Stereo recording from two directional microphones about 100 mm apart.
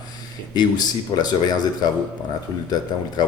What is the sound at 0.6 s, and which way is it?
Speech, 45° left (ahead or behind).